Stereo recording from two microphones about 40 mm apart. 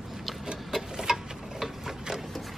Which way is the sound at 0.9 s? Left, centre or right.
Centre.